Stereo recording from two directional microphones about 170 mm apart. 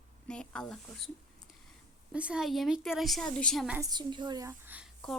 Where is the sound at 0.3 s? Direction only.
5° left (ahead or behind).